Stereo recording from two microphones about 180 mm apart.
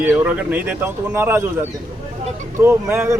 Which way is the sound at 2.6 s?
15° right (ahead or behind).